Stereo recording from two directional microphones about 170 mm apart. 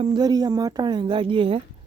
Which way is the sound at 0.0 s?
25° right (ahead or behind).